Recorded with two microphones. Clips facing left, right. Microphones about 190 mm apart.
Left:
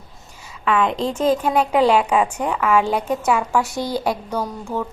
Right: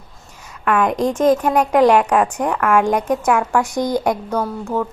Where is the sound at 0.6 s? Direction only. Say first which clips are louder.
Right 3 dB; 5° right (ahead or behind).